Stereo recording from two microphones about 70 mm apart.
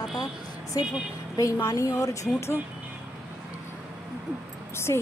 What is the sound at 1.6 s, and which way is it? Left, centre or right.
Speech, left.